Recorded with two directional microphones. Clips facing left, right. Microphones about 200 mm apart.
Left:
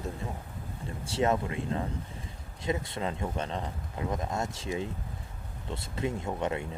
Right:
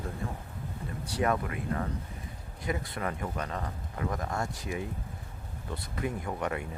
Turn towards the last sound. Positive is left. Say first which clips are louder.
# left 2 dB
turn(degrees=25)  # may be behind; listen again after turning